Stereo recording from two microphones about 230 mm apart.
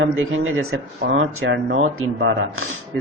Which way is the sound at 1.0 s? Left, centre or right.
Right.